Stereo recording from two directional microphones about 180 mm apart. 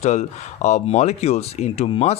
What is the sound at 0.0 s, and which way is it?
Speech, 40° left (ahead or behind).